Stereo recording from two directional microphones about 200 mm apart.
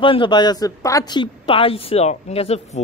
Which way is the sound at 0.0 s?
25° left (ahead or behind).